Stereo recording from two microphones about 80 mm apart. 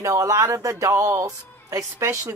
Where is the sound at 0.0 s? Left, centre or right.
Right.